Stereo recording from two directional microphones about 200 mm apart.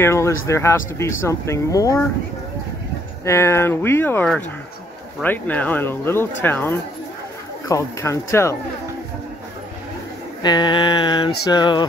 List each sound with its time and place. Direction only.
0.0 s speech: 15° left (ahead or behind)
3.3 s speech: 15° left (ahead or behind)
10.4 s a sound: 20° left (ahead or behind)